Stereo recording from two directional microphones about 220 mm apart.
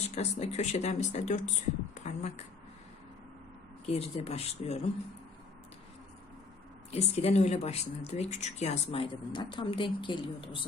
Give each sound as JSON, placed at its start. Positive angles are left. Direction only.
{"t": 0.1, "sound": "speech", "side_deg": 30}
{"t": 3.8, "sound": "speech", "side_deg": 30}
{"t": 6.9, "sound": "speech", "side_deg": 30}